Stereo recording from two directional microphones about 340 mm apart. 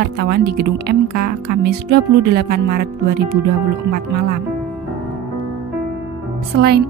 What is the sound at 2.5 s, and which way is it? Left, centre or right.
Speech, right.